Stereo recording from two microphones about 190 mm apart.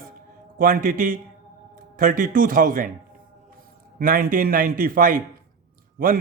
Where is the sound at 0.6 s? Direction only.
45° right (ahead or behind).